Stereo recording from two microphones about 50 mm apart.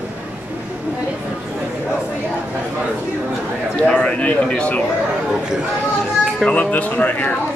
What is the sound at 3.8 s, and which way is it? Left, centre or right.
Speech, left.